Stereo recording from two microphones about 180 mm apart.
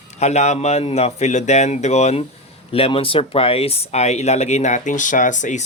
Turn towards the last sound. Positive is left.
turn(degrees=45)  # may be behind; listen again after turning